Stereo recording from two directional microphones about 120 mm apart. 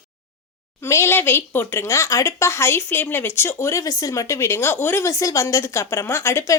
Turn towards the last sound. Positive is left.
turn(degrees=20)  # may be behind; listen again after turning